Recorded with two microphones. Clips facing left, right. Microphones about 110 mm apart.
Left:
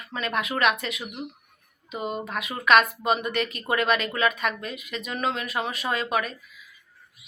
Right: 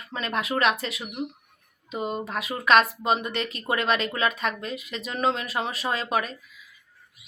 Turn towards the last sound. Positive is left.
turn(degrees=-35)  # may be behind; listen again after turning